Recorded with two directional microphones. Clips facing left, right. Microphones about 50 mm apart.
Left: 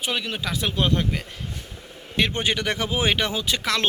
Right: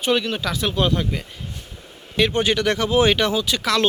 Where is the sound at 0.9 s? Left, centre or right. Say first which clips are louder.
Right 1 dB; left.